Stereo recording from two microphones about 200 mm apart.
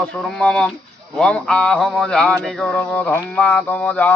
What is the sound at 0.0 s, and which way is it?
Speech, 5° left (ahead or behind).